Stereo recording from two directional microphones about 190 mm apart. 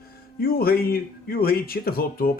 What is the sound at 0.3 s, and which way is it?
Speech, 50° left (ahead or behind).